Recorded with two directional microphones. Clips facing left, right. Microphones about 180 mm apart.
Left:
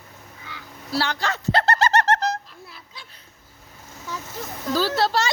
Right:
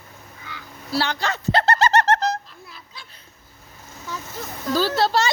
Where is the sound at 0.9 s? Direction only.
20° right (ahead or behind).